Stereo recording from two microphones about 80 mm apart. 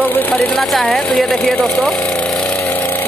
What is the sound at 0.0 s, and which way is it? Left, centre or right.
Sewing machine, left.